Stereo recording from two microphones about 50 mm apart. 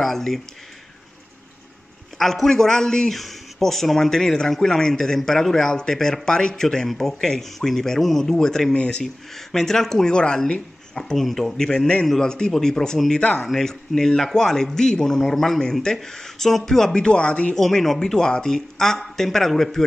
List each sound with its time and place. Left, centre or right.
0.0 s speech: centre
2.1 s speech: centre
3.2 s speech: centre
9.0 s speech: centre
11.1 s speech: centre; by 13.5 s left
13.5 s speech: centre
15.2 s speech: centre
15.6 s speech: centre
17.6 s speech: centre